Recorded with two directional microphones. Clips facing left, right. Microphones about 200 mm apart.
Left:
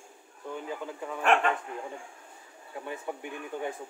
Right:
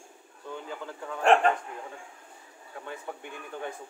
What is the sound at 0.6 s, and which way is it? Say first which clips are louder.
Speech: left 3 dB; 10° left (ahead or behind).